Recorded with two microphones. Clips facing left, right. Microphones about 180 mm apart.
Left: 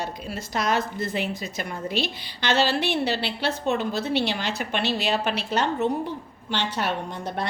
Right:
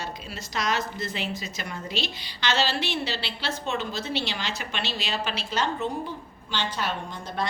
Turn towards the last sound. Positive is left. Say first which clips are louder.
# left 3 dB
turn(degrees=65)  # may be behind; listen again after turning